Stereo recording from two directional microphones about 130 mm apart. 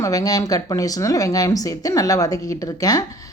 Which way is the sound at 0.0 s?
25° left (ahead or behind).